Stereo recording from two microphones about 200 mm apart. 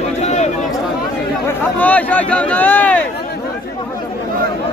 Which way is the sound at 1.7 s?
10° left (ahead or behind).